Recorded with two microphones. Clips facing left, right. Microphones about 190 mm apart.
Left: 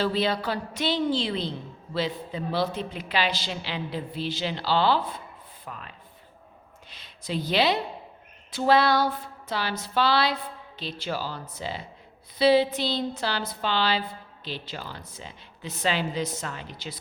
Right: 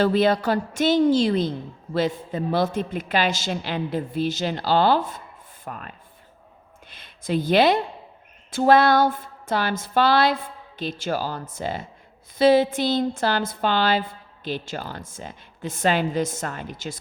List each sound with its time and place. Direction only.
0.0 s a woman's voice: 50° right (ahead or behind)